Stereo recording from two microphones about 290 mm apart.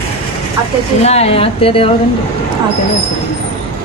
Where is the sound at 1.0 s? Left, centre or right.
Left.